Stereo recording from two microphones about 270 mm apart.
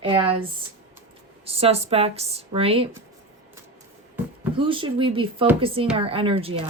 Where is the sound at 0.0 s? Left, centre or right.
Centre.